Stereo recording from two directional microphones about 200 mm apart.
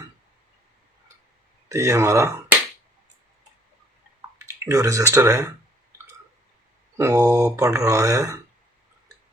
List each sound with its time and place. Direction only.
1.7 s speech: 15° right (ahead or behind)
4.6 s speech: 15° right (ahead or behind)
6.9 s speech: 15° right (ahead or behind)